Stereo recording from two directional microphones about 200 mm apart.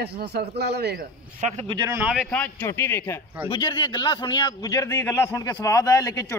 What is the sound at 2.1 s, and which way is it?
Speech, centre (ahead or behind).